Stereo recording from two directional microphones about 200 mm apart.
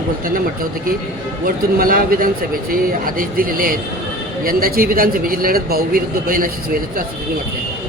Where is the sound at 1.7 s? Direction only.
45° right (ahead or behind).